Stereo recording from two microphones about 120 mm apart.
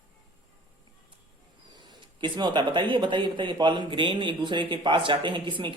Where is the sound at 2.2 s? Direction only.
40° right (ahead or behind).